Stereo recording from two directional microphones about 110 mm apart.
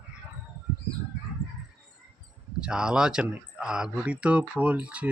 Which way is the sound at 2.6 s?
10° right (ahead or behind).